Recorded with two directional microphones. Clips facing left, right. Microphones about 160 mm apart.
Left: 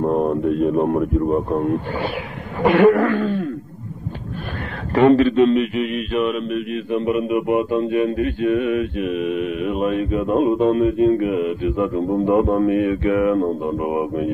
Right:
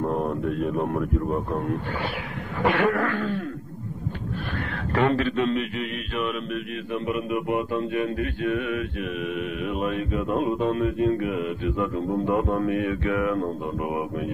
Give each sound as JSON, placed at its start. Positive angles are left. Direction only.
{"t": 0.3, "sound": "a man's voice", "side_deg": 25}
{"t": 2.7, "sound": "a man's voice", "side_deg": 20}
{"t": 4.9, "sound": "a man's voice", "side_deg": 20}